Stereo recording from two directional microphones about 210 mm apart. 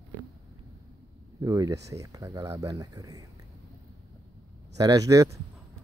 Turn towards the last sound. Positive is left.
turn(degrees=-15)  # may be behind; listen again after turning